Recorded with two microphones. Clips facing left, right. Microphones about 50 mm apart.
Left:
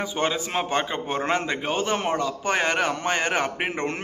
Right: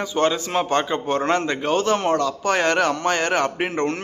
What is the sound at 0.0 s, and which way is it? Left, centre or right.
A man's voice, centre.